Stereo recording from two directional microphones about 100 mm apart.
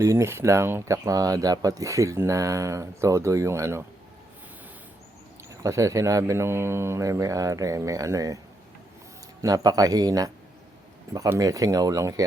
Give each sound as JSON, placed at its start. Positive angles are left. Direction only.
{"t": 0.0, "sound": "speech", "side_deg": -30}
{"t": 5.6, "sound": "speech", "side_deg": -35}
{"t": 9.4, "sound": "speech", "side_deg": -40}
{"t": 11.3, "sound": "speech", "side_deg": -35}